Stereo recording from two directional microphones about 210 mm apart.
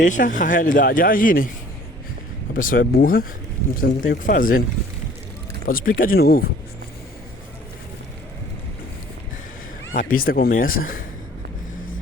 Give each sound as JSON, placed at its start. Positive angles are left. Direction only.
{"t": 0.0, "sound": "speech", "side_deg": 35}
{"t": 2.5, "sound": "speech", "side_deg": 40}
{"t": 5.6, "sound": "speech", "side_deg": 40}
{"t": 9.9, "sound": "speech", "side_deg": 40}